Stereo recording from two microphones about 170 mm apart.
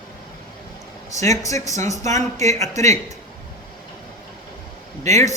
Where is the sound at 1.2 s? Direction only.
20° left (ahead or behind).